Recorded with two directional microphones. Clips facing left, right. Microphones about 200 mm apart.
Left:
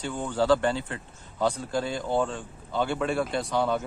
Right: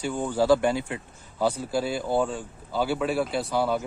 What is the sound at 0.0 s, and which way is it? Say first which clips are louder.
Speech: right 2 dB; 10° right (ahead or behind).